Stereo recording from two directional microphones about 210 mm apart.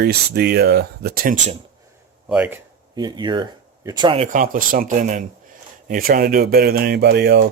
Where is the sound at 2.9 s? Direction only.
20° right (ahead or behind).